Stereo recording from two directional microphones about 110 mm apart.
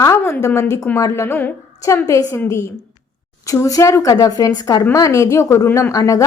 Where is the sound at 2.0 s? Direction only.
30° left (ahead or behind).